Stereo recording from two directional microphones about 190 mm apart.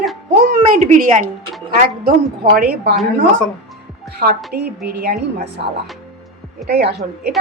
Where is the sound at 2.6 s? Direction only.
55° right (ahead or behind).